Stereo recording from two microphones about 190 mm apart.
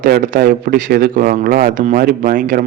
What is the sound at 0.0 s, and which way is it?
A man's voice, 50° right (ahead or behind).